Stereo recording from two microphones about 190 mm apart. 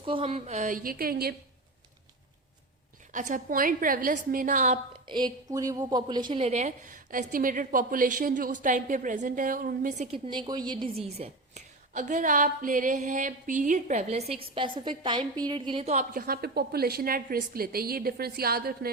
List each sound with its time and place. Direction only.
0.0 s a woman's voice: 30° right (ahead or behind); by 1.4 s 55° right (ahead or behind)
3.1 s a woman's voice: 40° right (ahead or behind)
5.0 s a woman's voice: 25° right (ahead or behind); by 10.2 s 40° right (ahead or behind)
10.2 s a woman's voice: 25° right (ahead or behind)
16.1 s a woman's voice: 50° right (ahead or behind)